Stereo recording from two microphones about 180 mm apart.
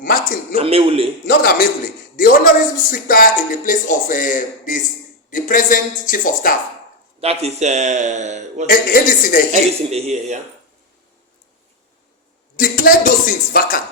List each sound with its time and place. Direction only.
0.0 s speech: 50° left (ahead or behind)
0.5 s speech: 30° right (ahead or behind)
1.3 s a man's voice: 55° left (ahead or behind)
7.2 s speech: 35° right (ahead or behind)
8.6 s speech: 55° left (ahead or behind)
9.5 s speech: 40° right (ahead or behind)
12.5 s speech: 50° left (ahead or behind)